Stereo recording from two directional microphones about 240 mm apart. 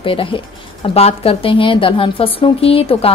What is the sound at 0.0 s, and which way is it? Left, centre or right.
A woman's voice, left.